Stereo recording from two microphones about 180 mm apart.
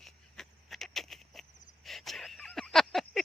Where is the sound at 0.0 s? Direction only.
Centre (ahead or behind).